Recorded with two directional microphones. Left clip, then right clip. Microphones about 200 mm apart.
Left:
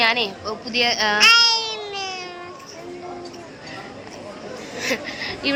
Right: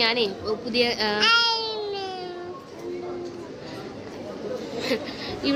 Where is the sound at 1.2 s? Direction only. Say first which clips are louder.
Left 6 dB; 20° right (ahead or behind).